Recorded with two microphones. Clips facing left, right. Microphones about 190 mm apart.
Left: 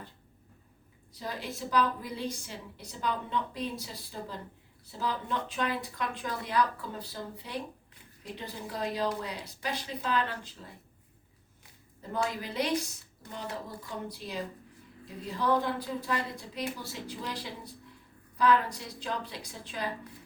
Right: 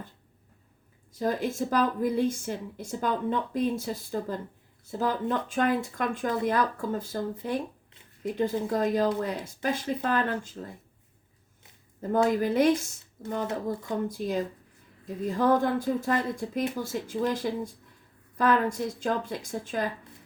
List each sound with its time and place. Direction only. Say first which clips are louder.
1.1 s a woman's voice: right 10 dB; 50° right (ahead or behind)
12.1 s a woman's voice: right 9 dB; 50° right (ahead or behind)